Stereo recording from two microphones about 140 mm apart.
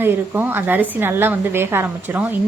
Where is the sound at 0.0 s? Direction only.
15° right (ahead or behind).